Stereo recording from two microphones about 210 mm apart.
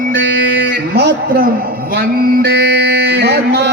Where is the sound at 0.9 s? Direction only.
50° right (ahead or behind).